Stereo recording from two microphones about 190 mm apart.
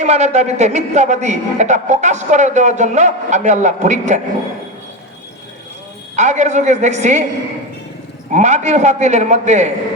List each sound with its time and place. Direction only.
0.0 s a man's voice: 35° right (ahead or behind)
6.1 s a man's voice: 40° right (ahead or behind)
8.3 s a man's voice: 40° right (ahead or behind)